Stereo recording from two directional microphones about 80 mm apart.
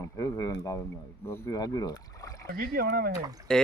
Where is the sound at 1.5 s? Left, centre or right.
Left.